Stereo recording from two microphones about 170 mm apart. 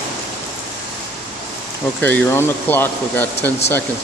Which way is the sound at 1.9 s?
10° left (ahead or behind).